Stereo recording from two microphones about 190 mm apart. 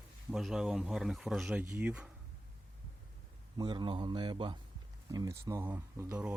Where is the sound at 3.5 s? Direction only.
25° right (ahead or behind); by 6.3 s 5° right (ahead or behind).